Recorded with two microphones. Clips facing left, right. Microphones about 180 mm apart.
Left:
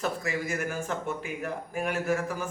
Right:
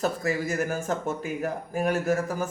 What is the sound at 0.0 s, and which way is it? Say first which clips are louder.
Speech: right 4 dB; 40° right (ahead or behind).